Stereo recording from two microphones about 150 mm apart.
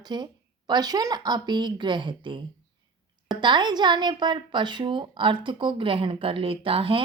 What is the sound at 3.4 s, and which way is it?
Speech, 30° right (ahead or behind).